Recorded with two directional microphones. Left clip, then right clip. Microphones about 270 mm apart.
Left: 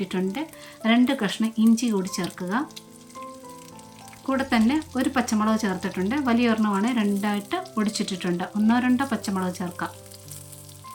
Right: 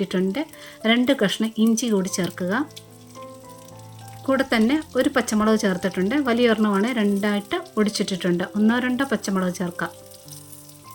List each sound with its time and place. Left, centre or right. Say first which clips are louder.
0.0 s speech: right 4 dB; centre
4.3 s speech: right 3 dB; centre